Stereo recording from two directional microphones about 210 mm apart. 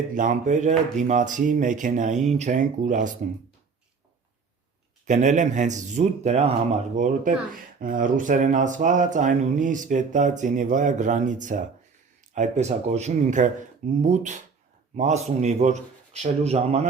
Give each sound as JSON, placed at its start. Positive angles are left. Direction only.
{"t": 0.1, "sound": "speech", "side_deg": -35}
{"t": 5.0, "sound": "speech", "side_deg": -35}